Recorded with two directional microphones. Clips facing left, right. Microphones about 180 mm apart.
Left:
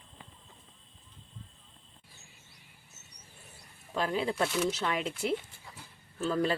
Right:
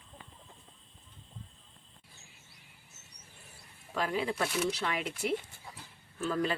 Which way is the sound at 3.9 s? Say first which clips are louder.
Left 2 dB; 30° left (ahead or behind).